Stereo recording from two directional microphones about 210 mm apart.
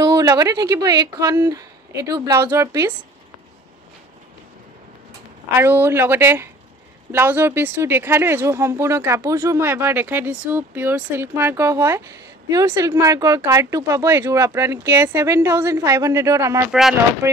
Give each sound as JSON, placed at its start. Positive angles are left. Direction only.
{"t": 0.0, "sound": "a woman's voice", "side_deg": -15}
{"t": 5.6, "sound": "a woman's voice", "side_deg": -10}